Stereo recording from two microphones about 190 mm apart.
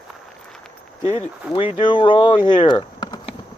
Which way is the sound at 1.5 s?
30° left (ahead or behind).